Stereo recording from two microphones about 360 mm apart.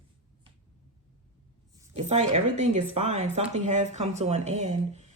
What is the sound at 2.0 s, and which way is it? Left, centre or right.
Speech, centre.